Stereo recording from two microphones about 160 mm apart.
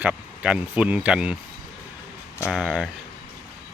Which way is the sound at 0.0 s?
5° right (ahead or behind).